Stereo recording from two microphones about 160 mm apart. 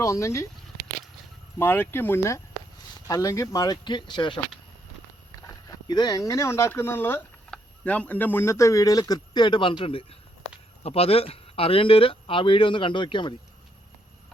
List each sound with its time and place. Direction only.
0.0 s speech: 20° left (ahead or behind)
1.5 s speech: 15° left (ahead or behind); by 4.4 s 30° left (ahead or behind)
5.5 s speech: 20° left (ahead or behind)